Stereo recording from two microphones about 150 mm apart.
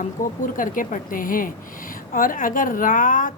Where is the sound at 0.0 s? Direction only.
60° left (ahead or behind).